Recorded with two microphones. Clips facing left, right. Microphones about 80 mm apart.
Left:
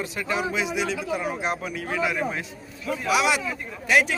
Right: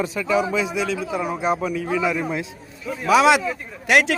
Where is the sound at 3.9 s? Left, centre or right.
Right.